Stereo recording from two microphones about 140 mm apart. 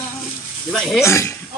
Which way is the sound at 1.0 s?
20° left (ahead or behind).